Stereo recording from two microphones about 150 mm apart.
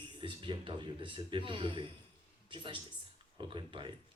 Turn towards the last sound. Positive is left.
turn(degrees=-35)  # may be behind; listen again after turning